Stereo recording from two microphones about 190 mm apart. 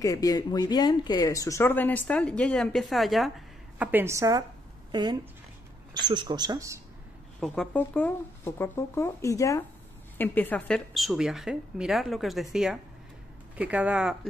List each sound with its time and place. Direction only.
0.0 s speech: 20° left (ahead or behind); by 6.8 s 20° right (ahead or behind)
7.3 s speech: 5° left (ahead or behind)